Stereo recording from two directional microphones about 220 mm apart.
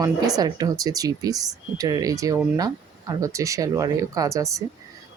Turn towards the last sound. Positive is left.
turn(degrees=-15)  # may be behind; listen again after turning